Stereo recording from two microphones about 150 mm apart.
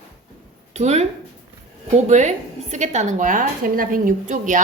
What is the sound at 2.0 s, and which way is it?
A woman's voice, 50° right (ahead or behind).